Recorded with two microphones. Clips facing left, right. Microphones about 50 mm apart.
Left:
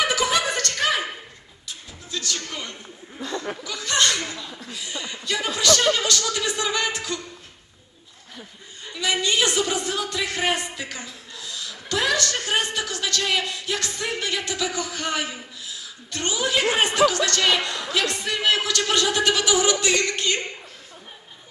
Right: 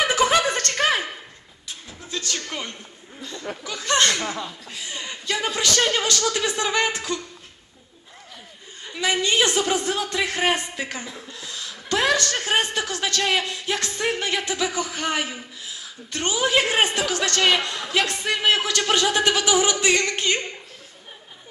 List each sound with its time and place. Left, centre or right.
0.1 s chuckle: right
2.0 s music: right
3.6 s chuckle: right
5.9 s speech: right
8.9 s a woman's voice: right